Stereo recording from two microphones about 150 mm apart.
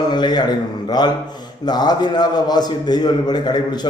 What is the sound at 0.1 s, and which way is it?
A man's voice, 30° left (ahead or behind).